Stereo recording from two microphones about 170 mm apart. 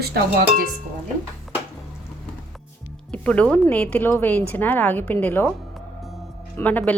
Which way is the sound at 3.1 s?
5° left (ahead or behind).